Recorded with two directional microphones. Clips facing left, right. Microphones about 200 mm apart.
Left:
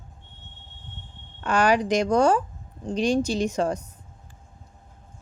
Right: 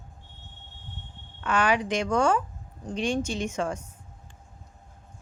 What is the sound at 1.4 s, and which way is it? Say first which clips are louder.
Speech: left 4 dB; 40° left (ahead or behind).